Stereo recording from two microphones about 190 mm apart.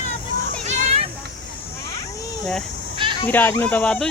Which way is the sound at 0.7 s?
35° right (ahead or behind).